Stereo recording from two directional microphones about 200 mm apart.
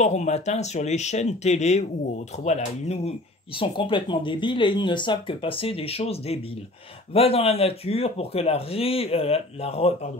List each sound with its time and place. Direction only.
0.0 s speech: 35° left (ahead or behind)